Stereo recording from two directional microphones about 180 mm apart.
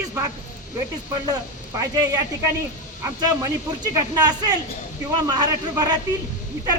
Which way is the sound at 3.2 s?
20° right (ahead or behind).